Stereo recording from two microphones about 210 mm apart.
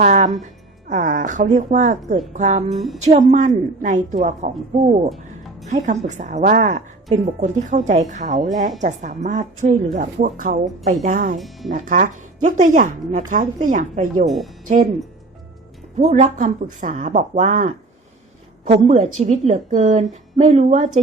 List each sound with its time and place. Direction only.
0.0 s music: 35° right (ahead or behind)
0.9 s a woman's voice: 40° right (ahead or behind)
5.0 s music: centre (ahead or behind)
5.6 s a woman's voice: 35° right (ahead or behind)
11.3 s speech: centre (ahead or behind)
11.7 s a woman's voice: 40° right (ahead or behind)
14.3 s speech: centre (ahead or behind)
16.0 s a woman's voice: 35° right (ahead or behind)